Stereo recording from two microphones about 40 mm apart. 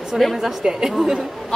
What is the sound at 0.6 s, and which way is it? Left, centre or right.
Speech, centre.